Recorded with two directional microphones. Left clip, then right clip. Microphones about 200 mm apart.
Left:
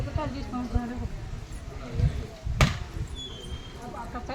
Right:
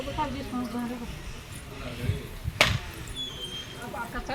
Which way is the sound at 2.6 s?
55° left (ahead or behind).